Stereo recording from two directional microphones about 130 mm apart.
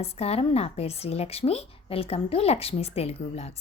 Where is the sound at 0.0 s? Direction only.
50° left (ahead or behind).